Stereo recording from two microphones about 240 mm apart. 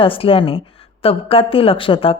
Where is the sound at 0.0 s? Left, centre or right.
Left.